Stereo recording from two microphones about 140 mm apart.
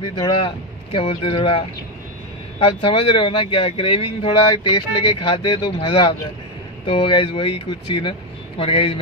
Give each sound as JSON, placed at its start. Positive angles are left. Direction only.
{"t": 0.9, "sound": "speech", "side_deg": 40}
{"t": 2.6, "sound": "speech", "side_deg": 35}